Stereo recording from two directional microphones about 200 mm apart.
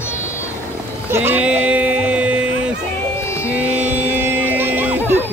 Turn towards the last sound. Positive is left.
turn(degrees=-10)  # may be behind; listen again after turning